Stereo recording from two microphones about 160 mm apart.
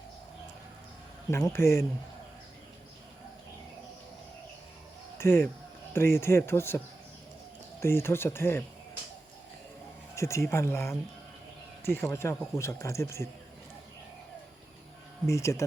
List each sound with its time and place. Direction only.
1.3 s speech: 15° left (ahead or behind)
5.1 s speech: 15° left (ahead or behind)
10.2 s speech: 20° left (ahead or behind)
15.3 s speech: 20° left (ahead or behind)